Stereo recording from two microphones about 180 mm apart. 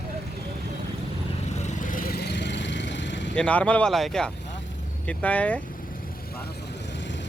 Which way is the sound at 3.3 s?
5° left (ahead or behind).